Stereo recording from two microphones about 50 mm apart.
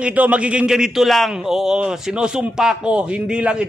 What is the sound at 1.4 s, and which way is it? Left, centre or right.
A man's voice, centre.